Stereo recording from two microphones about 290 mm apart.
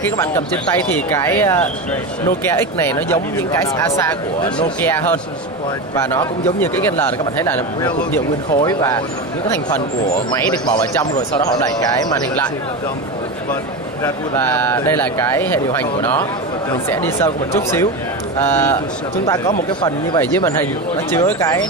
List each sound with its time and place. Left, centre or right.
1.1 s speech: centre
4.6 s speech: centre
10.7 s speech: centre
14.0 s speech: centre